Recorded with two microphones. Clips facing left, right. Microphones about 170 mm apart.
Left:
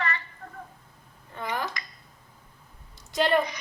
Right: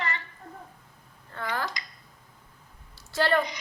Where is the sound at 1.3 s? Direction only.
15° left (ahead or behind).